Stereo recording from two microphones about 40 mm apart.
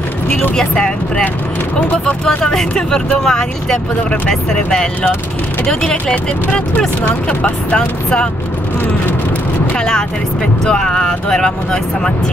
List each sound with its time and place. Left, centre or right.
0.6 s speech: centre
1.8 s speech: left
2.2 s speech: centre
7.7 s speech: left
9.8 s speech: centre